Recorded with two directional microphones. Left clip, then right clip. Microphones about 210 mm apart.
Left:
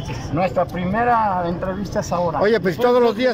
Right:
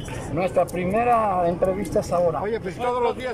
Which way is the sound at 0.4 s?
5° right (ahead or behind).